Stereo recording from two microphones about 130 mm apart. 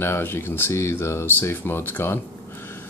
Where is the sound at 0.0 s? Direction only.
20° left (ahead or behind).